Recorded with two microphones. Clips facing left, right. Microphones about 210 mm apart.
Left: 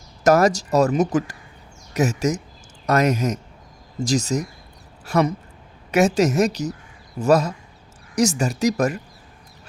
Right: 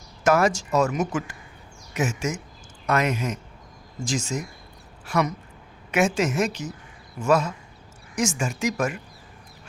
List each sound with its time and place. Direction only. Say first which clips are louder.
0.3 s speech: left 4 dB; 40° left (ahead or behind)